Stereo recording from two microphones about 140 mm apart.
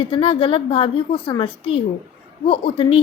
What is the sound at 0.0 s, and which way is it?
Speech, 40° left (ahead or behind).